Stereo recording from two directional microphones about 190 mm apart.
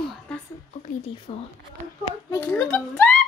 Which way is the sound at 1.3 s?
30° left (ahead or behind).